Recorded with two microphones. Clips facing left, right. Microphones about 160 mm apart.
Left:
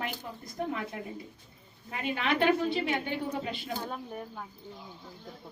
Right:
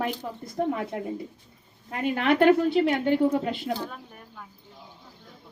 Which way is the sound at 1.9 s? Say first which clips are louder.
Right 7 dB; 55° right (ahead or behind).